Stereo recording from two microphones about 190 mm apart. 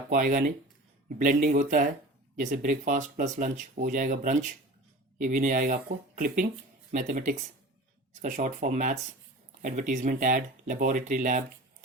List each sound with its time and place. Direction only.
0.1 s speech: 45° right (ahead or behind)